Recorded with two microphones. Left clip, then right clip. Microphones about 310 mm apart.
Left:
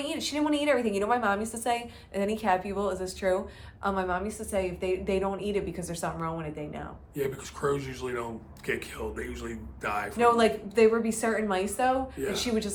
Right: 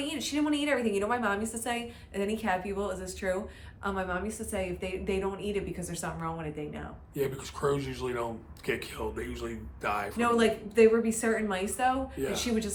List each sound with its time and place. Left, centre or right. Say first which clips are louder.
0.0 s a woman's voice: left 2 dB; centre
7.2 s speech: even; centre
10.2 s a woman's voice: left 5 dB; centre